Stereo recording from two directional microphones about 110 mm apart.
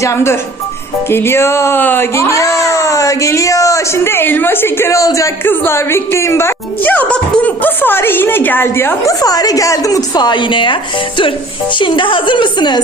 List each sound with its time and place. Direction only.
0.0 s speech: 25° left (ahead or behind)
9.2 s a woman's voice: 35° left (ahead or behind)
11.8 s a woman's voice: 50° left (ahead or behind)